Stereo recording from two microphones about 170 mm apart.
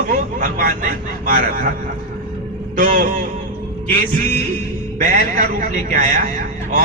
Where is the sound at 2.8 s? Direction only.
50° right (ahead or behind).